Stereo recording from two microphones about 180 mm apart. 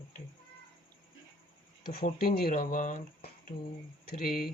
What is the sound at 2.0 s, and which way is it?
Speech, 55° left (ahead or behind).